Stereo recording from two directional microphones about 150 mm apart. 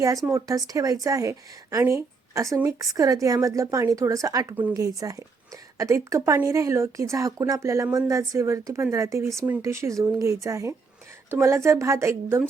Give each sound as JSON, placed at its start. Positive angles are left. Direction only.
{"t": 0.0, "sound": "a woman's voice", "side_deg": -20}